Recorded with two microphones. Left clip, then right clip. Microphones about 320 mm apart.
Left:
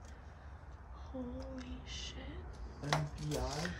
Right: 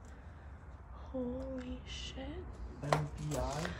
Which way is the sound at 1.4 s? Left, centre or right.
Centre.